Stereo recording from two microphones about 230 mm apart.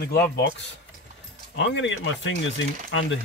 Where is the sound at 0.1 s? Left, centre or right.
Left.